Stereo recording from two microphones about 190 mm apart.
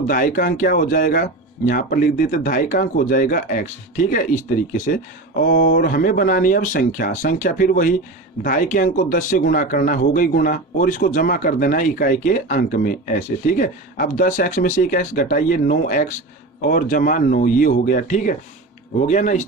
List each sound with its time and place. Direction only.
0.1 s speech: 45° left (ahead or behind)